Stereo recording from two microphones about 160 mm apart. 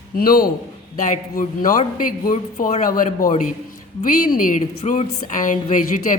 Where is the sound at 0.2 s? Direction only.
65° left (ahead or behind).